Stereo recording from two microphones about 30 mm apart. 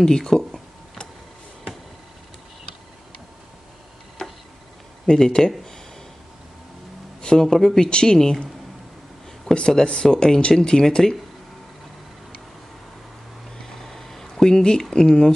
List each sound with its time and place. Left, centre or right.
0.3 s speech: centre
4.2 s tick-tock: centre
5.1 s speech: centre
7.2 s speech: left
9.5 s speech: left
13.7 s a sound: centre
14.4 s speech: left